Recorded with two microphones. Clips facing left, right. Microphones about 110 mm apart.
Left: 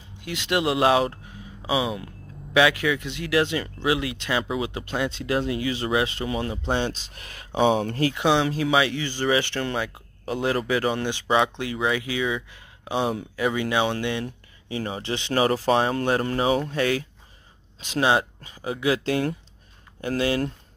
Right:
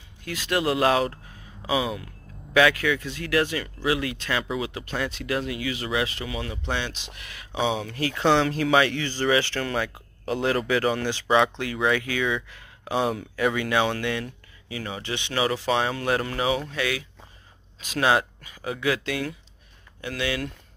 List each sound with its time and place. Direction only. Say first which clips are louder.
0.2 s speech: left 1 dB; 20° left (ahead or behind); by 8.0 s 45° left (ahead or behind)
8.2 s speech: right 2 dB; 15° left (ahead or behind); by 17.0 s 40° left (ahead or behind)
17.7 s speech: left 1 dB; 30° left (ahead or behind)